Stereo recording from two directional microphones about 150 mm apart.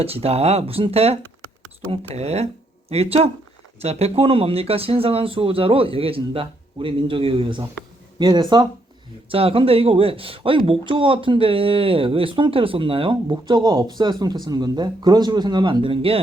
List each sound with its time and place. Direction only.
0.0 s speech: 40° right (ahead or behind)